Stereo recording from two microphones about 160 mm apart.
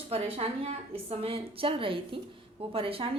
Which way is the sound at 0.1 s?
40° right (ahead or behind).